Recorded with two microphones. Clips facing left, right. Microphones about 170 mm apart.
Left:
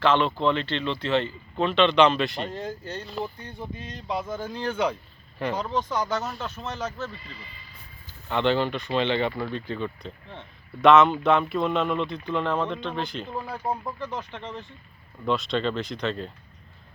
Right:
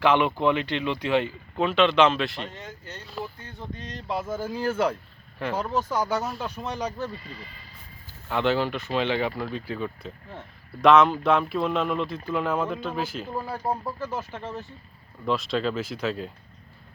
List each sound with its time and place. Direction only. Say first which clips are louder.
0.0 s speech: right 1 dB; 15° right (ahead or behind)
2.5 s speech: left 8 dB; 35° left (ahead or behind)
3.3 s a sound: left 3 dB; 15° left (ahead or behind)
3.8 s speech: right 1 dB; centre (ahead or behind)
7.1 s speech: right 3 dB; 45° right (ahead or behind)
8.3 s speech: left 1 dB; 5° right (ahead or behind)